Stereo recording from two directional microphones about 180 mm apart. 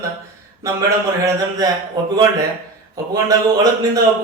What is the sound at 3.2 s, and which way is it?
Speech, 20° right (ahead or behind).